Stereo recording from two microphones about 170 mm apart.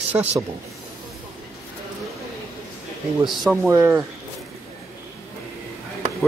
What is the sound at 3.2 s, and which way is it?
Speech, centre (ahead or behind).